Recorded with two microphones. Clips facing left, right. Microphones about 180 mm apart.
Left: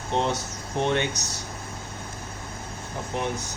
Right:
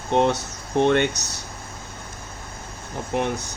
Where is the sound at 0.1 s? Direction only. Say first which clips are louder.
Right 6 dB; 60° right (ahead or behind).